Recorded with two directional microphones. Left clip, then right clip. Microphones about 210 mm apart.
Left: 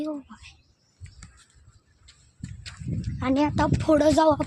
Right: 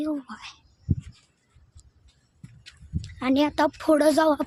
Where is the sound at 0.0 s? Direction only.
15° right (ahead or behind).